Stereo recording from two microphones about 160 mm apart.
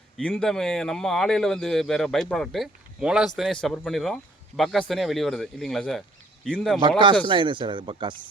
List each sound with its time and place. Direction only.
0.2 s a man's voice: 5° left (ahead or behind)
7.3 s speech: 30° right (ahead or behind)